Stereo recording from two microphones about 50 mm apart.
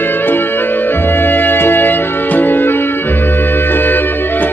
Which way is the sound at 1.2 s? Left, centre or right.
Left.